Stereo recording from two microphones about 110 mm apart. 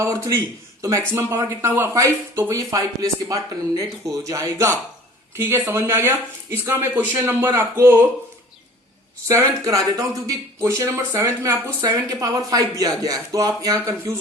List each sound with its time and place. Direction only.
0.0 s speech: 30° right (ahead or behind)
9.2 s speech: 30° right (ahead or behind)